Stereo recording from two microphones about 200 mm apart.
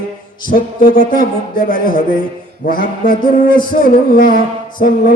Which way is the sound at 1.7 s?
45° left (ahead or behind).